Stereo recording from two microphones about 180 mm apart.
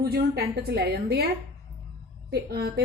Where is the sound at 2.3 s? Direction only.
60° right (ahead or behind).